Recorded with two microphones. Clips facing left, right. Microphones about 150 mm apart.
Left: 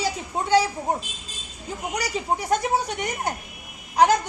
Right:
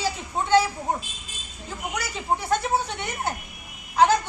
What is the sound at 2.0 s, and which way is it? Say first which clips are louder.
Speech: left 1 dB; 15° left (ahead or behind).